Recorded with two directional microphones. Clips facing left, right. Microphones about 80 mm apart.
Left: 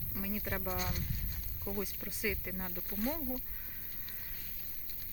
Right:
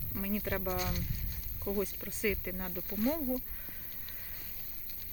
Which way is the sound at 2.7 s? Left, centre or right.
Centre.